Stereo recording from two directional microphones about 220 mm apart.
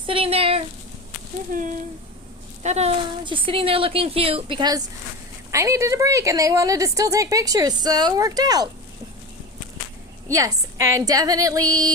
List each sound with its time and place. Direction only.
0.0 s a sound: 25° right (ahead or behind)
1.5 s a woman's voice: 40° right (ahead or behind); by 8.7 s 15° right (ahead or behind)
10.2 s a woman's voice: 15° right (ahead or behind)